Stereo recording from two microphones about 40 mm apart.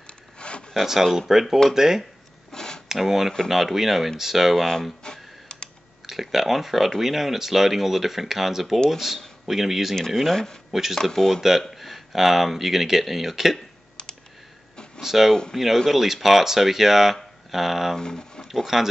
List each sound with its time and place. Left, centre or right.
0.0 s zipper: left
1.1 s speech: centre
2.5 s a sound: centre
2.9 s speech: centre
4.6 s speech: centre
5.0 s computer keyboard: left
6.0 s speech: centre
9.9 s speech: centre
10.7 s speech: centre
11.0 s speech: centre
11.6 s speech: centre
15.0 s speech: centre
17.9 s speech: centre
18.5 s speech: centre